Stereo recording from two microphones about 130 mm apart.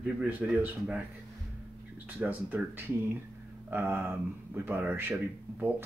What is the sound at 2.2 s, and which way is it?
Speech, 15° right (ahead or behind).